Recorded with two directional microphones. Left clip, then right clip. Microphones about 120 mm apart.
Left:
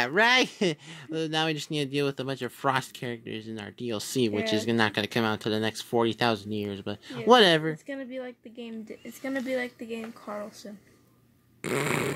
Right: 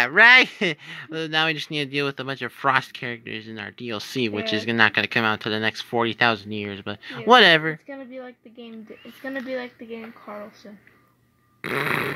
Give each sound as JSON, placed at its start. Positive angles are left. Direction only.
{"t": 0.0, "sound": "speech", "side_deg": 5}
{"t": 8.5, "sound": "speech", "side_deg": -5}
{"t": 10.2, "sound": "speech", "side_deg": -10}
{"t": 11.6, "sound": "fart", "side_deg": 15}